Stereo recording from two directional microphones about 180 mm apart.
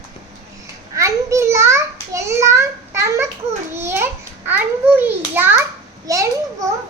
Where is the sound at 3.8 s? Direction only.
15° right (ahead or behind).